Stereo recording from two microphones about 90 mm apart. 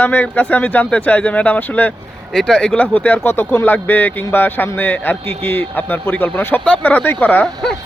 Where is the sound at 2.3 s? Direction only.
5° left (ahead or behind); by 7.5 s 20° left (ahead or behind).